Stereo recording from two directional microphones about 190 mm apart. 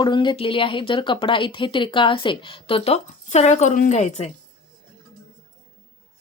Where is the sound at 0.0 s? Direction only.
25° left (ahead or behind).